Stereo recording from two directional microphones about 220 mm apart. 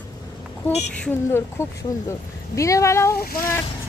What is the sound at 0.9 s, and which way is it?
Speech, 10° left (ahead or behind).